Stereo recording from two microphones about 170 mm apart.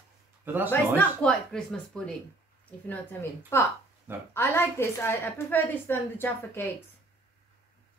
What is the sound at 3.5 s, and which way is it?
A woman's voice, 15° left (ahead or behind).